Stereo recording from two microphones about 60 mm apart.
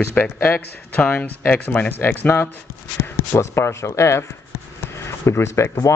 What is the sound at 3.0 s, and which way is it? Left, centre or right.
Speech, left.